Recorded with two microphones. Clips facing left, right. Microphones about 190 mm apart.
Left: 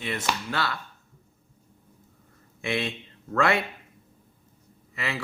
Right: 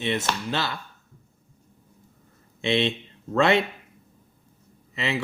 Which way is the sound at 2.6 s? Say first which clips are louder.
Right 6 dB; 25° right (ahead or behind).